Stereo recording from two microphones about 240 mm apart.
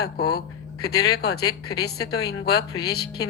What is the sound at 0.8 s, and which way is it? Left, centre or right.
Speech, centre.